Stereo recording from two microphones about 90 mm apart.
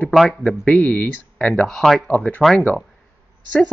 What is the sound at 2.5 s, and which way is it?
Speech, 15° left (ahead or behind).